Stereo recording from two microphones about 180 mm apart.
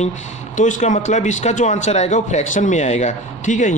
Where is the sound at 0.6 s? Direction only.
45° left (ahead or behind).